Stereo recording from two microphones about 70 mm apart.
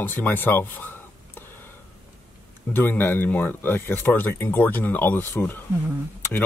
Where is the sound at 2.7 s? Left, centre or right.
Left.